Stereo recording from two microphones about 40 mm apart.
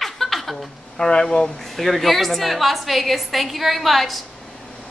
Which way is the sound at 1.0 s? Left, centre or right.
Centre.